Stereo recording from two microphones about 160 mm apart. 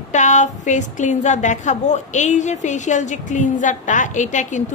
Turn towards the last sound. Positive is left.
turn(degrees=50)  # may be behind; listen again after turning